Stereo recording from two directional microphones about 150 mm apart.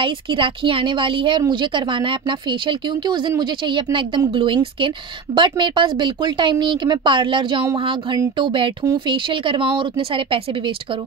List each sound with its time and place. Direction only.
0.0 s speech: 35° right (ahead or behind)